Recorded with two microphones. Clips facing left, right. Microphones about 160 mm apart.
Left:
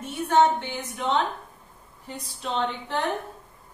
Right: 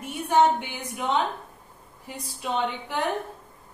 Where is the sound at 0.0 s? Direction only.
10° right (ahead or behind).